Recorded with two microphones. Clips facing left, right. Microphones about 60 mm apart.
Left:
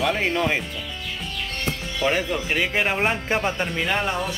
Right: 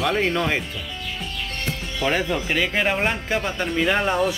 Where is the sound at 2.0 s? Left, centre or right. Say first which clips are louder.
Right 1 dB; centre.